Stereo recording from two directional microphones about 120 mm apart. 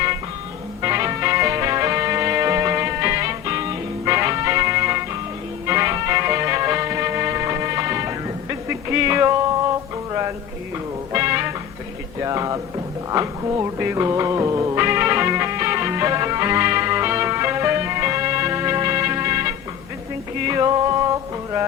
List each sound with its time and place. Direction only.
0.8 s music: 25° right (ahead or behind)
10.1 s a sound: 25° right (ahead or behind)
11.1 s music: 25° right (ahead or behind)